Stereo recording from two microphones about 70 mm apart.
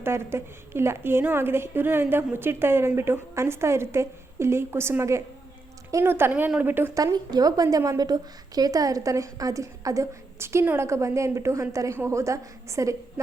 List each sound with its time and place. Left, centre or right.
0.0 s a woman's voice: right
6.9 s a woman's voice: right